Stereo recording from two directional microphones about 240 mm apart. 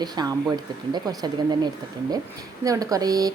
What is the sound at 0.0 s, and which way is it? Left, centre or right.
A woman's voice, centre.